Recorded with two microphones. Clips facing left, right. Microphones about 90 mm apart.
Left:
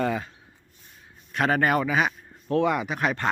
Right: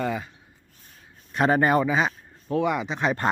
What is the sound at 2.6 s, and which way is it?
Speech, 15° right (ahead or behind).